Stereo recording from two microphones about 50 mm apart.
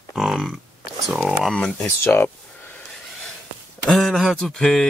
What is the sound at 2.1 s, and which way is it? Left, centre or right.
Speech, left.